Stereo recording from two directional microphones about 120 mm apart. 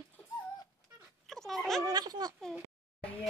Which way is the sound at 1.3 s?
Centre (ahead or behind).